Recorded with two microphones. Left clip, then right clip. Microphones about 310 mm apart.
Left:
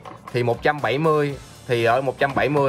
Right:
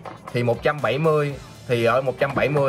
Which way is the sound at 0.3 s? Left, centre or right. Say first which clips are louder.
Left 1 dB; left.